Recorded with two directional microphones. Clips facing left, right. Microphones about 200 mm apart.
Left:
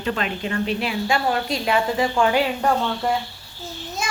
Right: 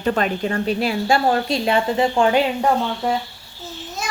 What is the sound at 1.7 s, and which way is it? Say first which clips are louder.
Speech: right 2 dB; 30° right (ahead or behind).